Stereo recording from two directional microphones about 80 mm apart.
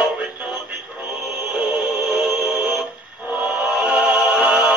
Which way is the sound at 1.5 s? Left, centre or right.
Centre.